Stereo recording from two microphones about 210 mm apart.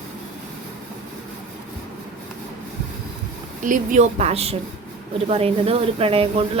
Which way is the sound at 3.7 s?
35° right (ahead or behind).